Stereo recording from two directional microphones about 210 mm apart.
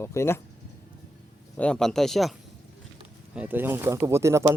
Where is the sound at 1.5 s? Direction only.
5° left (ahead or behind).